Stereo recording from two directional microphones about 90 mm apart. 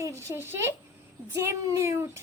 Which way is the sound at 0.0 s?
30° right (ahead or behind).